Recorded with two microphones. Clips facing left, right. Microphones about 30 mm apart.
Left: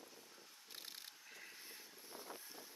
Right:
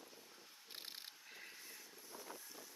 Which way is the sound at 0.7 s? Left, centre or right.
Right.